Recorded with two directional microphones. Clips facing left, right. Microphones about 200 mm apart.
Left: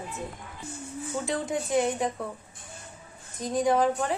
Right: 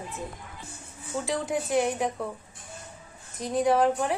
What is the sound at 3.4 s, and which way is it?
Speech, 5° right (ahead or behind).